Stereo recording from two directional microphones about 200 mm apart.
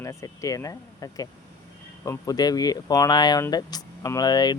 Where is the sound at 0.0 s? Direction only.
15° left (ahead or behind).